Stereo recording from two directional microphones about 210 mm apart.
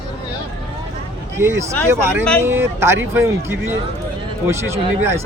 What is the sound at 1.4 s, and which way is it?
Speech, 10° right (ahead or behind).